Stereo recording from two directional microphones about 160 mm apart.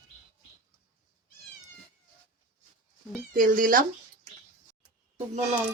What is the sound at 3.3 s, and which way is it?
Cat, 60° right (ahead or behind).